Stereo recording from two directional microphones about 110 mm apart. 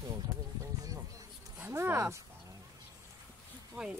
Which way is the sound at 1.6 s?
20° right (ahead or behind).